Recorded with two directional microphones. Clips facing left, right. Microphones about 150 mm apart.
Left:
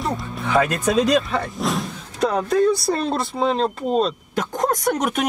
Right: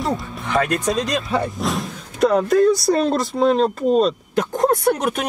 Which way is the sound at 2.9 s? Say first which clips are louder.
Right 4 dB; centre (ahead or behind).